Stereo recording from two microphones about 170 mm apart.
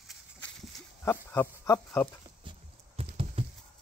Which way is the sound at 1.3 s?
15° left (ahead or behind).